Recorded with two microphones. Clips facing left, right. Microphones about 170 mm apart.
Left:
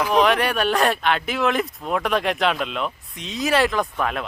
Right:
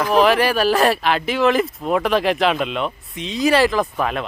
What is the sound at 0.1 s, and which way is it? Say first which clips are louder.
Speech: right 5 dB; centre (ahead or behind).